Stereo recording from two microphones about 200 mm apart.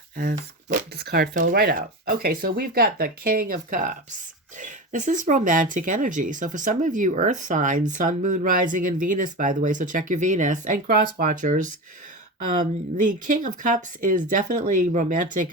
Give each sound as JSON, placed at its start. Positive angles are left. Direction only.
{"t": 0.2, "sound": "speech", "side_deg": -50}